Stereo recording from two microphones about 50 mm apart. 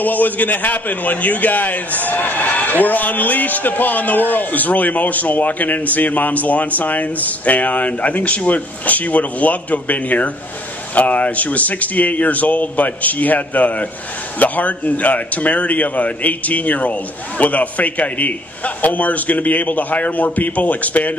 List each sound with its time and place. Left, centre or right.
0.0 s a man's voice: left